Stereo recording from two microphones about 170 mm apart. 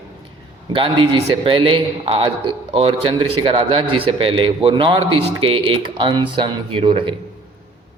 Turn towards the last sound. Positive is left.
turn(degrees=-30)  # may be behind; listen again after turning